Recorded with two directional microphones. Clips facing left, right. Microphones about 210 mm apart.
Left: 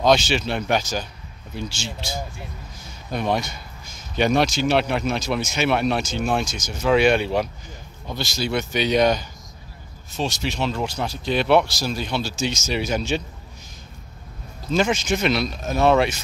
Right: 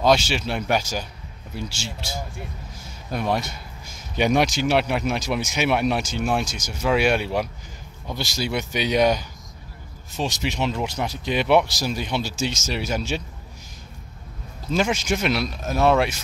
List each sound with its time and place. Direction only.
0.0 s speech: 5° right (ahead or behind)
12.4 s speech: 5° right (ahead or behind)
14.7 s speech: 10° right (ahead or behind)